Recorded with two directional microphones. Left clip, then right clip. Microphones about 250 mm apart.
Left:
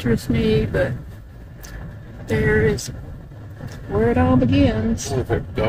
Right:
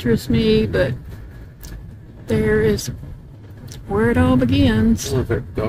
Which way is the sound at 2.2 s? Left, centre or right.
Centre.